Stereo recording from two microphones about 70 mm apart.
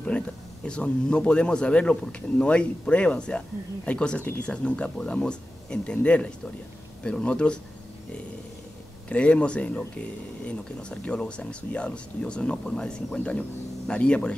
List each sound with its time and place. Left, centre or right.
0.1 s speech: centre
9.1 s speech: centre